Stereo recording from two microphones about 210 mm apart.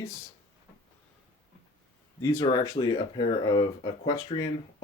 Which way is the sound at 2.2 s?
20° left (ahead or behind).